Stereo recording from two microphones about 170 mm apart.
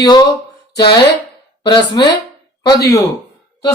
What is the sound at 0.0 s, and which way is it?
Speech, 25° left (ahead or behind).